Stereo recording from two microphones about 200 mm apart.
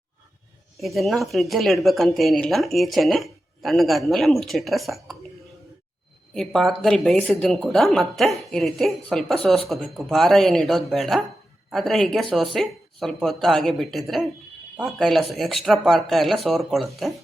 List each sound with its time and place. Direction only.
0.8 s a woman's voice: centre (ahead or behind)
6.3 s a woman's voice: centre (ahead or behind)